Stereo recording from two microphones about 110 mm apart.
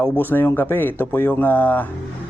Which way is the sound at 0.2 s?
15° left (ahead or behind).